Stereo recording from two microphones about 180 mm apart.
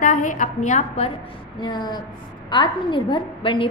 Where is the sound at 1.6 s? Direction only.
25° left (ahead or behind).